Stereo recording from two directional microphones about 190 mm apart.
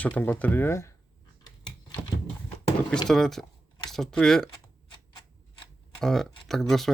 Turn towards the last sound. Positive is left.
turn(degrees=0)  # may be behind; listen again after turning